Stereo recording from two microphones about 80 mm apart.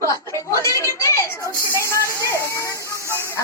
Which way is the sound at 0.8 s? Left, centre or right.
Left.